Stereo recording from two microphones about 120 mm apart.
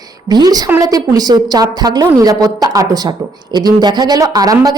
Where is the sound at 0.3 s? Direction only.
35° right (ahead or behind).